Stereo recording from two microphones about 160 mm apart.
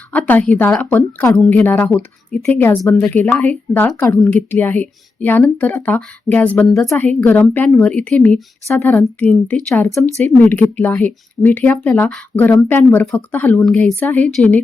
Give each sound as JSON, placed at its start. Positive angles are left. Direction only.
{"t": 0.1, "sound": "a woman's voice", "side_deg": 10}